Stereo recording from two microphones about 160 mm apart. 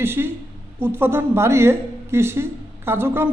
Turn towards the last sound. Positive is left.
turn(degrees=-15)  # may be behind; listen again after turning